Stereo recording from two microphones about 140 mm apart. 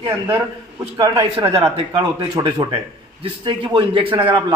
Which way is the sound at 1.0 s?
45° right (ahead or behind).